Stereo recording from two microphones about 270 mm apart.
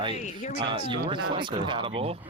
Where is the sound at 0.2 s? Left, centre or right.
Left.